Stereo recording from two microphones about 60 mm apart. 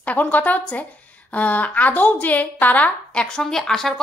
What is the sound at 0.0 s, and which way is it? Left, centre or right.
A woman's voice, left.